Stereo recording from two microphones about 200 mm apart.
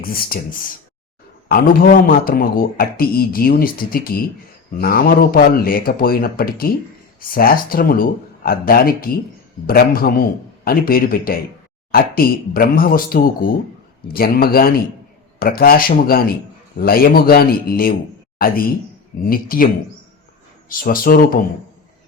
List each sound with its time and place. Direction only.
0.0 s a man's voice: 45° left (ahead or behind)
20.7 s a man's voice: 45° left (ahead or behind)